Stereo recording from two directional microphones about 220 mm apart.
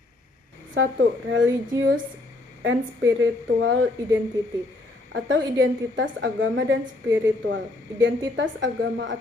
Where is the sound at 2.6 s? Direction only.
60° right (ahead or behind).